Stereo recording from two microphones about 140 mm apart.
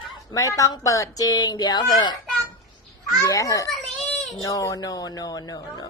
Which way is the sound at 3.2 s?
25° left (ahead or behind).